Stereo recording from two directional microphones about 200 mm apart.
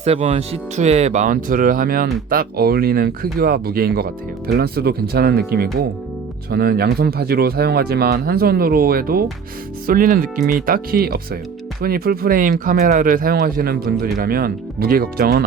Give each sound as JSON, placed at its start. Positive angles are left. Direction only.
{"t": 0.0, "sound": "speech", "side_deg": -30}